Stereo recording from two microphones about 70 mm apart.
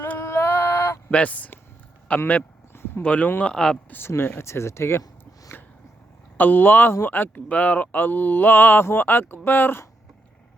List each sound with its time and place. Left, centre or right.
0.0 s a sound: left
1.1 s speech: left
3.5 s speech: centre
3.8 s speech: left
4.4 s speech: left
6.3 s speech: left